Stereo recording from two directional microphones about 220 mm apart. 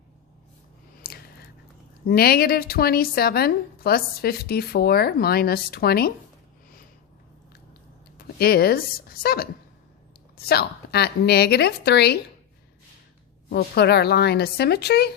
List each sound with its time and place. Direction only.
1.0 s a sound: 45° left (ahead or behind)
2.0 s a woman's voice: 45° left (ahead or behind)
8.4 s a woman's voice: 45° left (ahead or behind)
13.5 s a woman's voice: 45° left (ahead or behind)